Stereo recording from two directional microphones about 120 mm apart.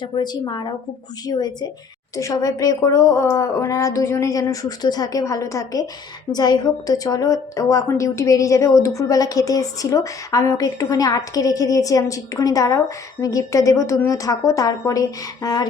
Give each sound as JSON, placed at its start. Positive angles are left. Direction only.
{"t": 0.0, "sound": "a woman's voice", "side_deg": 35}